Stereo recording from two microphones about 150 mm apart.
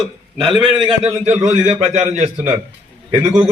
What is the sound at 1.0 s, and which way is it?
A man's voice, 45° right (ahead or behind).